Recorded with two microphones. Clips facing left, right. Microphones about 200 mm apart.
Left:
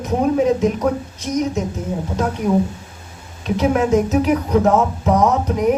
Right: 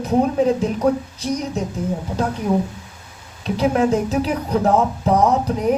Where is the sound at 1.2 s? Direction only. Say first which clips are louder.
Left 5 dB; 35° right (ahead or behind).